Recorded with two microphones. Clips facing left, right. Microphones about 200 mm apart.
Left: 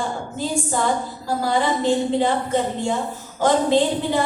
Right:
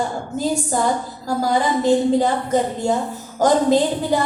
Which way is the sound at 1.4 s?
45° right (ahead or behind).